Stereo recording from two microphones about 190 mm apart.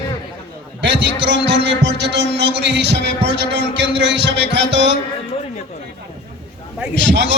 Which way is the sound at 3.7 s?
65° right (ahead or behind).